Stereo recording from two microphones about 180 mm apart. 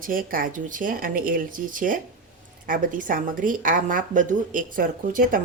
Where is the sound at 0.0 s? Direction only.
50° right (ahead or behind).